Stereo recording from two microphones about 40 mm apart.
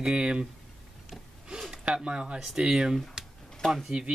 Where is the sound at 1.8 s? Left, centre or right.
Right.